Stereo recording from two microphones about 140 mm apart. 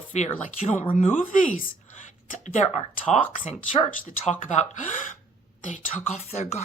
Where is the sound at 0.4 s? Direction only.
60° left (ahead or behind).